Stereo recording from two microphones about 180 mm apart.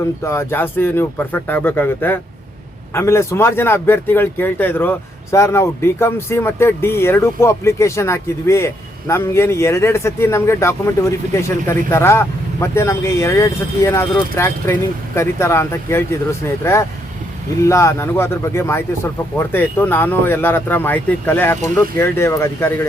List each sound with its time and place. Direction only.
0.3 s speech: 15° left (ahead or behind)